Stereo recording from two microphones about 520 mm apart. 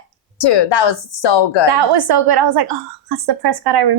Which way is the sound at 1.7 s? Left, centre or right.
Right.